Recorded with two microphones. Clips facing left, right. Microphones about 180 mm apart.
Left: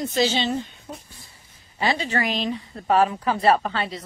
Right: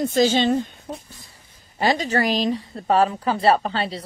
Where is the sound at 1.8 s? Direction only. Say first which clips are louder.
Right 3 dB; 40° right (ahead or behind).